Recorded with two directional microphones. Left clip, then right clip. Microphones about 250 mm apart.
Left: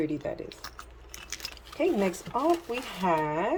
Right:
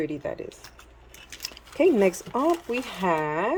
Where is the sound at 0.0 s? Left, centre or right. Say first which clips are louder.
Right 1 dB; centre.